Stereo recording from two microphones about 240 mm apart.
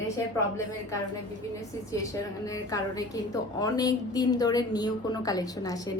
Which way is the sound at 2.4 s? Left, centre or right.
Centre.